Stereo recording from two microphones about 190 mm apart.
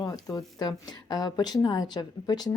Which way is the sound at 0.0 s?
20° left (ahead or behind).